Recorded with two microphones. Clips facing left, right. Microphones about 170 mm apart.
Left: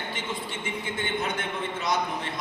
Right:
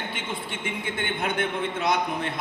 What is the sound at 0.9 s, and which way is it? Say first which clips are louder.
A man's voice: right 2 dB; 60° right (ahead or behind).